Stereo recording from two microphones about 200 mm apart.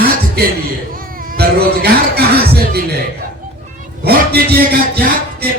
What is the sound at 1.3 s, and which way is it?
Speech, 50° right (ahead or behind).